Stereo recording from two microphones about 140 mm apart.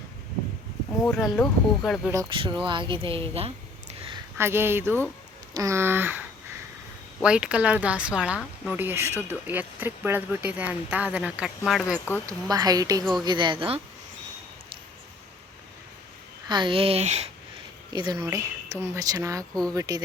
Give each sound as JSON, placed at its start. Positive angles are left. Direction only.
{"t": 1.0, "sound": "speech", "side_deg": 5}
{"t": 2.3, "sound": "speech", "side_deg": -40}
{"t": 4.4, "sound": "speech", "side_deg": -15}
{"t": 12.2, "sound": "speech", "side_deg": -25}
{"t": 16.5, "sound": "speech", "side_deg": -35}
{"t": 17.9, "sound": "speech", "side_deg": -30}
{"t": 18.2, "sound": "speech", "side_deg": -20}